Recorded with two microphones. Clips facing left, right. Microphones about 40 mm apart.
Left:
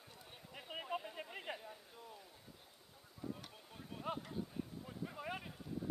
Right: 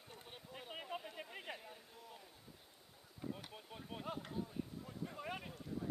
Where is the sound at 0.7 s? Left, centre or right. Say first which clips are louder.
Left 4 dB; centre.